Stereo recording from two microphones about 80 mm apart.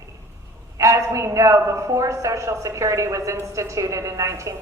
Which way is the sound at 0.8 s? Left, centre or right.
Right.